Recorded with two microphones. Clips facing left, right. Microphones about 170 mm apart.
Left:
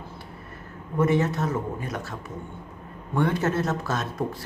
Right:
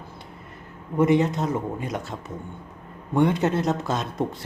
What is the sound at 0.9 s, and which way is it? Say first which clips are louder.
Speech: right 3 dB; 15° right (ahead or behind).